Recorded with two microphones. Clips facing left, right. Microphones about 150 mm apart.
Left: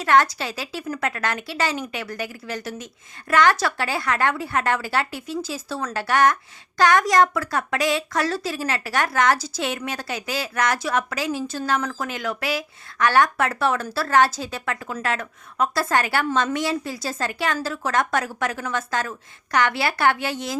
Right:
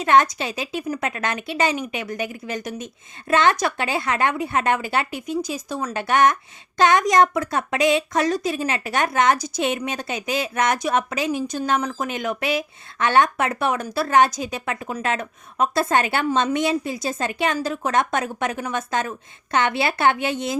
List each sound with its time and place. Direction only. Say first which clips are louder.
0.0 s speech: right 1 dB; 20° right (ahead or behind)